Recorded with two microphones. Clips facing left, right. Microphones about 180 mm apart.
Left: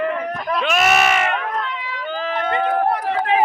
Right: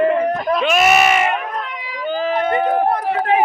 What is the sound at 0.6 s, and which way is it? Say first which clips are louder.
Run: right 2 dB; 5° right (ahead or behind).